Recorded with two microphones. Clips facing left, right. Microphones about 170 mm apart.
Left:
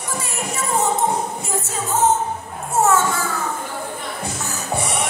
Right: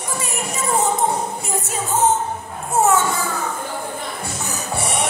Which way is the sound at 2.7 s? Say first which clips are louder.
Even; 15° right (ahead or behind).